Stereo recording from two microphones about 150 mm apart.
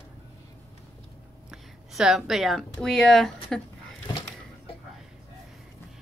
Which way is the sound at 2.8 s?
5° left (ahead or behind).